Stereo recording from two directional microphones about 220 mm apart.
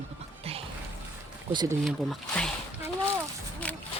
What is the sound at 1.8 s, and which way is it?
Speech, centre (ahead or behind).